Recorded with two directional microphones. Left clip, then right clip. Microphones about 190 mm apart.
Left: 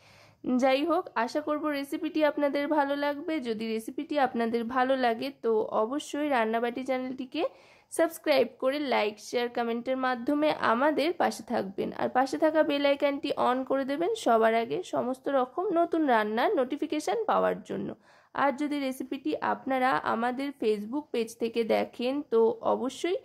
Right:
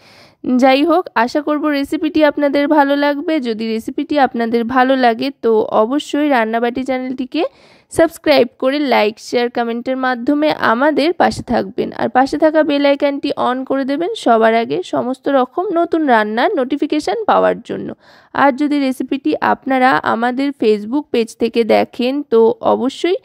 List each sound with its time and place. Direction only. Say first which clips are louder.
0.5 s speech: right 14 dB; 45° right (ahead or behind)